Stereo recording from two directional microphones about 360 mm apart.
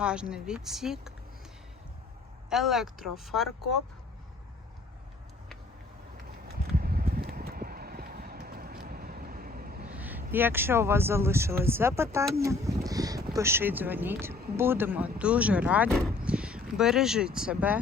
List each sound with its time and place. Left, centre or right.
0.0 s speech: centre
2.5 s speech: centre
6.5 s a sound: right
9.9 s speech: centre